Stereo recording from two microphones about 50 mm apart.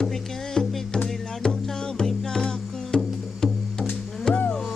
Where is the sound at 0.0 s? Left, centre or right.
Centre.